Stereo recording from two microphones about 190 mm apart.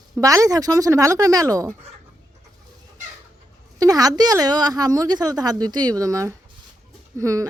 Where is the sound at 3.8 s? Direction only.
20° right (ahead or behind).